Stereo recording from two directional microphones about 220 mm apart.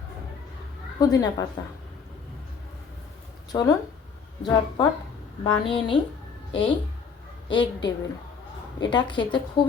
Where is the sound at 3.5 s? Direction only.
20° left (ahead or behind).